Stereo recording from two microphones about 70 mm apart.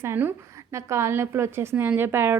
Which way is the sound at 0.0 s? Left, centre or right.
Right.